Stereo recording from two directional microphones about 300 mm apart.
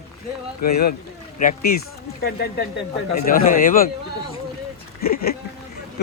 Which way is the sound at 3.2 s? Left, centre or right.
Left.